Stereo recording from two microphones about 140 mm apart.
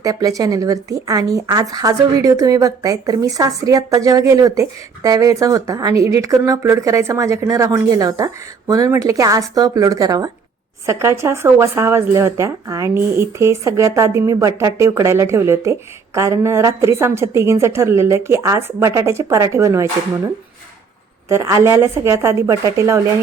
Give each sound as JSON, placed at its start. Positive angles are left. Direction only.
{"t": 0.0, "sound": "speech", "side_deg": -25}
{"t": 21.2, "sound": "speech", "side_deg": -20}